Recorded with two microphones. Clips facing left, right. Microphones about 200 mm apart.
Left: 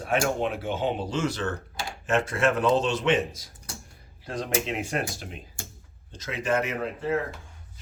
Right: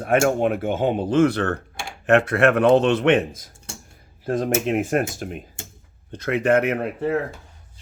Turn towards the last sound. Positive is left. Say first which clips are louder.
# right 7 dB
turn(degrees=-60)  # may be behind; listen again after turning